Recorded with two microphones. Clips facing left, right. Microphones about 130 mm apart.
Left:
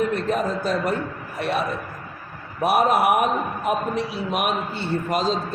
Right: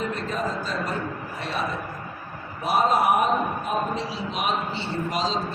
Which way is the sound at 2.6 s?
65° left (ahead or behind).